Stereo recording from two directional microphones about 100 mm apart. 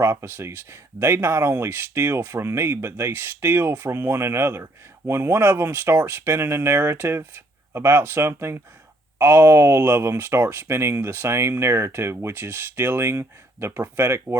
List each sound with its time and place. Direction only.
0.0 s speech: 25° right (ahead or behind)